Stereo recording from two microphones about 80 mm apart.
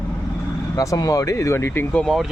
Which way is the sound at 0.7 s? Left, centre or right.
Left.